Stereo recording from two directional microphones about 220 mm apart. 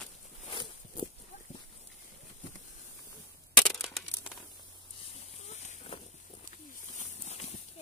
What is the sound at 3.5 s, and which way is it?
Crushing, 5° left (ahead or behind).